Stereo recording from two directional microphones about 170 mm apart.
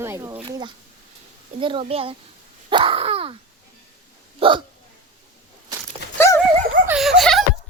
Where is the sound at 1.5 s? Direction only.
30° right (ahead or behind).